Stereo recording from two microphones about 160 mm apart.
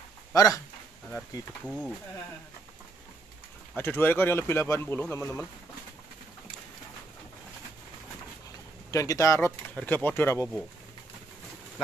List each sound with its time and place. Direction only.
0.3 s speech: 20° left (ahead or behind)
1.6 s speech: 5° left (ahead or behind)
3.7 s speech: 10° left (ahead or behind)
8.9 s speech: 20° left (ahead or behind)